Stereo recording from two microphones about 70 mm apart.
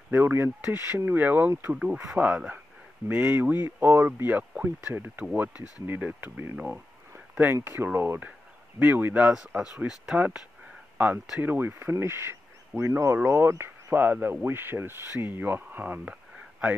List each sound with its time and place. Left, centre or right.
0.1 s speech: right; by 2.6 s centre
3.1 s speech: right
5.2 s speech: centre
7.1 s a sound: right
7.5 s speech: right
11.4 s speech: right
15.8 s a sound: centre